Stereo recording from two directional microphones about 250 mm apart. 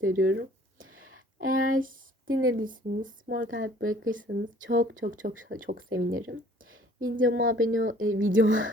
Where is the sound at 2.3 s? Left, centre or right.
Right.